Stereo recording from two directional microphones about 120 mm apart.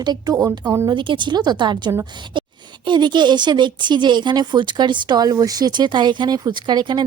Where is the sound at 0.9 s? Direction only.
40° right (ahead or behind).